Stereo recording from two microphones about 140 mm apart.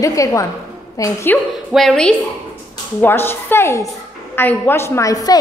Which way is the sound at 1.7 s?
Centre (ahead or behind).